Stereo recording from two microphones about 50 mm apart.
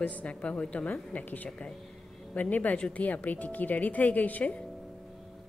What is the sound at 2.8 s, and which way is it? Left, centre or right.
Speech, left.